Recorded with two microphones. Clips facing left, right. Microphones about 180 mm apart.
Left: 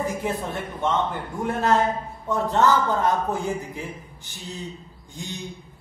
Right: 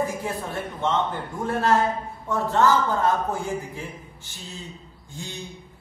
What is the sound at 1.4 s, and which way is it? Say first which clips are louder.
A man's voice: even; 20° left (ahead or behind).